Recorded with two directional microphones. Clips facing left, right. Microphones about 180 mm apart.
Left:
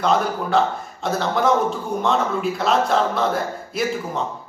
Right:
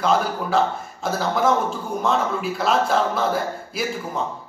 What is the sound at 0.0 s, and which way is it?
A man's voice, centre (ahead or behind).